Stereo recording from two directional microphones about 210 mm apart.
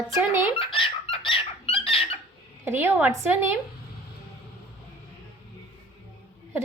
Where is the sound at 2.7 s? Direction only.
10° right (ahead or behind).